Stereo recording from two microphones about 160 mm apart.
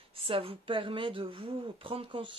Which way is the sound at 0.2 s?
35° right (ahead or behind).